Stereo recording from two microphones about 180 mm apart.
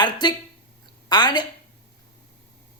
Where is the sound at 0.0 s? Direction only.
25° left (ahead or behind).